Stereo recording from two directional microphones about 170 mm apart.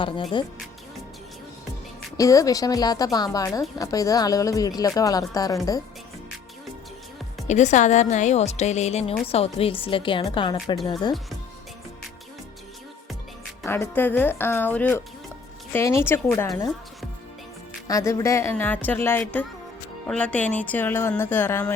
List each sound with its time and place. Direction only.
0.0 s a woman's voice: 25° left (ahead or behind)
2.1 s a woman's voice: 20° left (ahead or behind)
7.4 s a woman's voice: 45° left (ahead or behind); by 10.8 s 30° left (ahead or behind)
13.7 s speech: 10° left (ahead or behind)
17.8 s speech: 20° left (ahead or behind)